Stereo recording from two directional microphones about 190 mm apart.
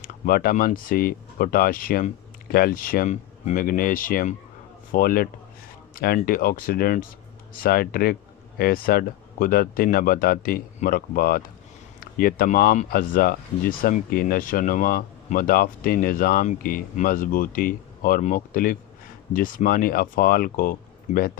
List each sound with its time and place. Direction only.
0.0 s speech: 50° left (ahead or behind)